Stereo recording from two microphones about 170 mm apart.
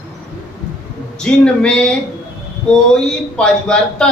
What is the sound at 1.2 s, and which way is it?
A man's voice, 5° left (ahead or behind).